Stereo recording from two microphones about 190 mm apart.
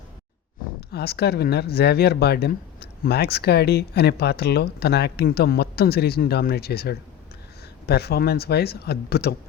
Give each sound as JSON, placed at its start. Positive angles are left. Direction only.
{"t": 0.8, "sound": "speech", "side_deg": 55}